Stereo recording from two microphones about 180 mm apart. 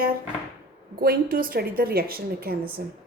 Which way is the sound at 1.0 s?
55° right (ahead or behind).